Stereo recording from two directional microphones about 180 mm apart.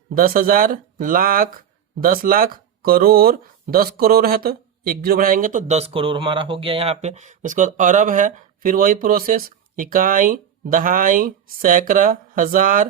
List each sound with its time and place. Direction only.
0.1 s speech: 55° right (ahead or behind)